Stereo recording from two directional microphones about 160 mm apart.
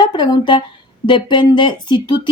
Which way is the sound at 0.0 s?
25° left (ahead or behind).